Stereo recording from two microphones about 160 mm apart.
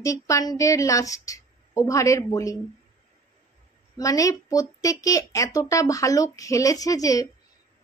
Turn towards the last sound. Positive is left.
turn(degrees=20)  # may be behind; listen again after turning